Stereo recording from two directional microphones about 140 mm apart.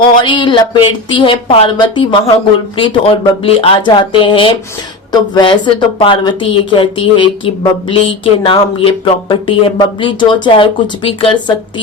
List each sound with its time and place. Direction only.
0.2 s speech: 35° left (ahead or behind)